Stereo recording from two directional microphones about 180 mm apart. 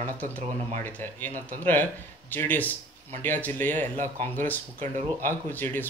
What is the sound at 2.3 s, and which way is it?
Speech, 10° left (ahead or behind).